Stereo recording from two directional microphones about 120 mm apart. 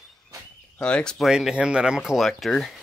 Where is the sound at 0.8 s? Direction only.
10° left (ahead or behind).